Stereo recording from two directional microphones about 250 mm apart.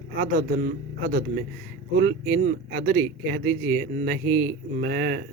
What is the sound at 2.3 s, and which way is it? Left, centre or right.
Speech, right.